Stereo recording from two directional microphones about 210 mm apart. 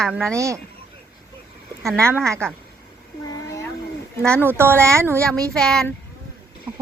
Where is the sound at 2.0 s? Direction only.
10° right (ahead or behind).